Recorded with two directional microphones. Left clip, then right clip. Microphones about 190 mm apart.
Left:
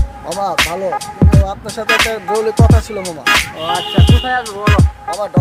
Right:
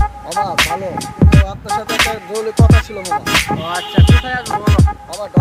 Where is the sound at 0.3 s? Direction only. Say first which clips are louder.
Left 1 dB; centre (ahead or behind).